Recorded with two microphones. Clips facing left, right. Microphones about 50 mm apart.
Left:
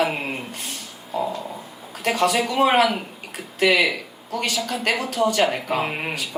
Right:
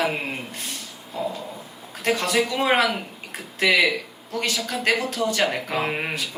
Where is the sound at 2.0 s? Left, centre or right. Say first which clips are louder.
Left 2 dB; centre.